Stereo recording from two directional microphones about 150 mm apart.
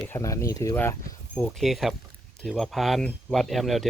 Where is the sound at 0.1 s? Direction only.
20° left (ahead or behind).